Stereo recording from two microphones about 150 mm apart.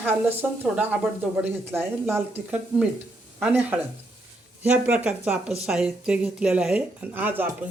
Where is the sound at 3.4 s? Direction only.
10° right (ahead or behind).